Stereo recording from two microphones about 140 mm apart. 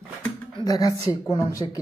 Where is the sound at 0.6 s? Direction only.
25° left (ahead or behind).